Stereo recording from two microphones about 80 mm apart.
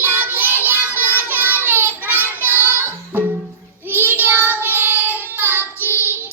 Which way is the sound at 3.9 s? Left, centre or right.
Right.